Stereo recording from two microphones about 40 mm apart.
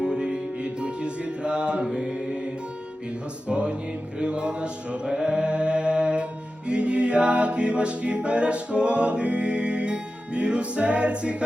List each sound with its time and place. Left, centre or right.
0.0 s music: right
1.9 s mantra: right
3.5 s music: right
4.2 s mantra: right
6.7 s music: right